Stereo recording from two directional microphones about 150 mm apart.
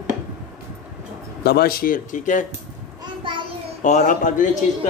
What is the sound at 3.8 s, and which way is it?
Speech, 55° left (ahead or behind).